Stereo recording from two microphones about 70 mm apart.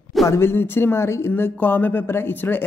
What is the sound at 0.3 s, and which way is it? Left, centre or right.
Speech, left.